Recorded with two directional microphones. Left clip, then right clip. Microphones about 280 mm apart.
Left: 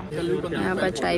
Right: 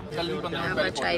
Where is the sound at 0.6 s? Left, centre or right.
Centre.